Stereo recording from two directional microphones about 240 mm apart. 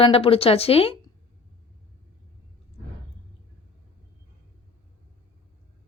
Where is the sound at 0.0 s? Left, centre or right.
Left.